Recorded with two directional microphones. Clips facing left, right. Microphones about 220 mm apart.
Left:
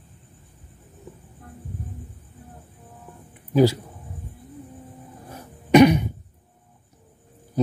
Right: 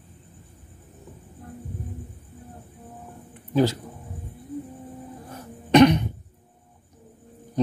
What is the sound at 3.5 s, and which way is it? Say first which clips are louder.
Speech: left 3 dB; 10° left (ahead or behind).